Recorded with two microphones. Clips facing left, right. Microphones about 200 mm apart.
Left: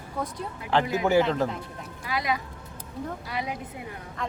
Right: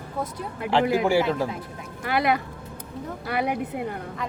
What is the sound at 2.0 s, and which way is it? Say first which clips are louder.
A woman's voice: right 6 dB; 65° right (ahead or behind).